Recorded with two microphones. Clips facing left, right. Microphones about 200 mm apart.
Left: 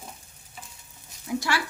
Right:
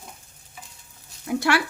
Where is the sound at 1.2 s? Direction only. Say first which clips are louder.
Right 5 dB; 65° right (ahead or behind).